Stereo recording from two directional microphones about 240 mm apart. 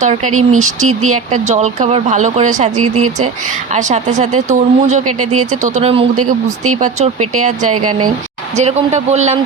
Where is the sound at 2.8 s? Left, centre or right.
Right.